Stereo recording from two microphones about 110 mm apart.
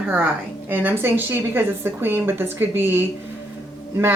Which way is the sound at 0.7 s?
15° right (ahead or behind).